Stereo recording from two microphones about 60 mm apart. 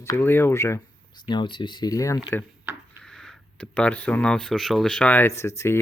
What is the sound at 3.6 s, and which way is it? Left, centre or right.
Speech, left.